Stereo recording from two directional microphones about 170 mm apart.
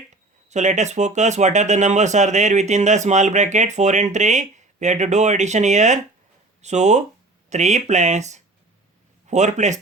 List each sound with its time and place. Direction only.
0.5 s speech: 45° right (ahead or behind)